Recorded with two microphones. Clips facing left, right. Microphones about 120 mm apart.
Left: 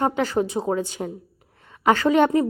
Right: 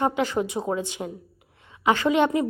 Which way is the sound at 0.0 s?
40° left (ahead or behind).